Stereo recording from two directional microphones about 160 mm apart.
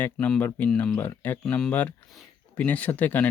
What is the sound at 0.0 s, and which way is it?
Speech, 10° left (ahead or behind).